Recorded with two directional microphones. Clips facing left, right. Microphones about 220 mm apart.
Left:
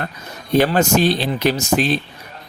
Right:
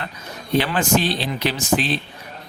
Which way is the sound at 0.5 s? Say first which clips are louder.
Left 4 dB; 45° left (ahead or behind).